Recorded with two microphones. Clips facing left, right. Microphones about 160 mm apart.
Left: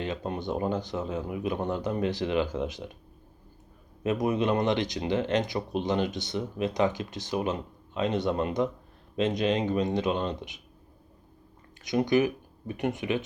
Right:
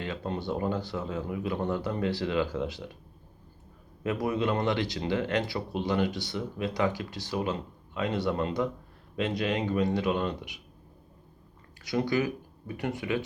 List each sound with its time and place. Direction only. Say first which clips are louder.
0.0 s speech: left 1 dB; 20° left (ahead or behind)
4.0 s speech: left 2 dB; 20° left (ahead or behind)
11.8 s speech: left 4 dB; 20° left (ahead or behind)